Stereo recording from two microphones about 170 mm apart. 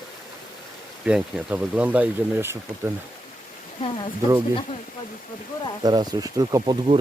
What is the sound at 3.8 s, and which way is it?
Speech, 30° left (ahead or behind).